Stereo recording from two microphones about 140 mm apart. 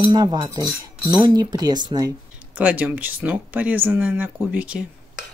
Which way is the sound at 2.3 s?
10° right (ahead or behind).